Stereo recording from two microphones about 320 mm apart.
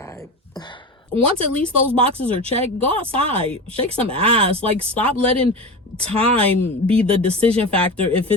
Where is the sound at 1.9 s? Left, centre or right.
Centre.